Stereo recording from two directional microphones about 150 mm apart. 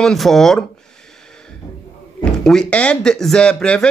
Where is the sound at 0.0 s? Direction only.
Centre (ahead or behind).